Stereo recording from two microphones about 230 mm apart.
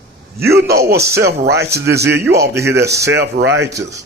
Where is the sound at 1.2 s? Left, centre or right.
Right.